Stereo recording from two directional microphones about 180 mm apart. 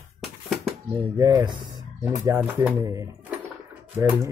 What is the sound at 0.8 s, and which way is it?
Speech, 20° right (ahead or behind).